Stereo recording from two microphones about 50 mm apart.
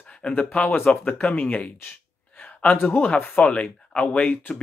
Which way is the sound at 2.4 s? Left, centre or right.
Left.